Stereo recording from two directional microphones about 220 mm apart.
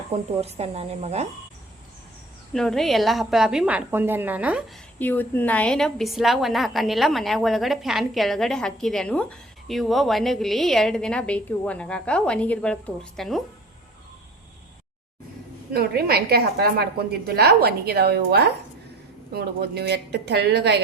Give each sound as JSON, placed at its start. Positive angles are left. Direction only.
{"t": 0.1, "sound": "a woman's voice", "side_deg": -25}
{"t": 2.5, "sound": "a woman's voice", "side_deg": 0}
{"t": 4.9, "sound": "a woman's voice", "side_deg": 10}
{"t": 15.7, "sound": "a woman's voice", "side_deg": -45}